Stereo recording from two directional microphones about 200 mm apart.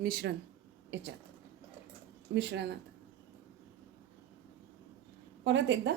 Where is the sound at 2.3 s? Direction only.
60° right (ahead or behind).